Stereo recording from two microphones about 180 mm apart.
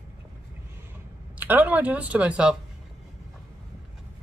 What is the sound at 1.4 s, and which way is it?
Speech, 10° right (ahead or behind).